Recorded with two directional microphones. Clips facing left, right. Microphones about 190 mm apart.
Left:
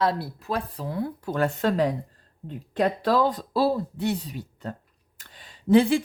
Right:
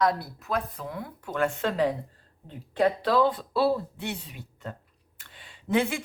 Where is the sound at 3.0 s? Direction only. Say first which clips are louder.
Left 1 dB; 45° left (ahead or behind).